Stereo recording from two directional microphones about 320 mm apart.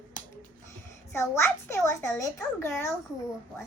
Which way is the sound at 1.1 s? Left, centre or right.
Centre.